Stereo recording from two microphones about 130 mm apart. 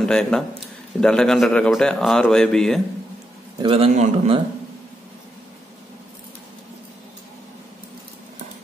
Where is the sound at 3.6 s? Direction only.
45° right (ahead or behind).